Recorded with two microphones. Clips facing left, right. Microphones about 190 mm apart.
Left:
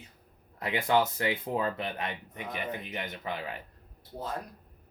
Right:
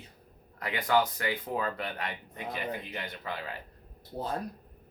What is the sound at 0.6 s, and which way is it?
Speech, 25° left (ahead or behind).